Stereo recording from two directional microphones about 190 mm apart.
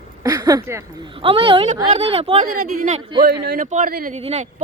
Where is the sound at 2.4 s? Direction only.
40° right (ahead or behind).